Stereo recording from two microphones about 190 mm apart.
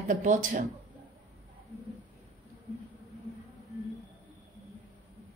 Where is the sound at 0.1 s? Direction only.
40° right (ahead or behind).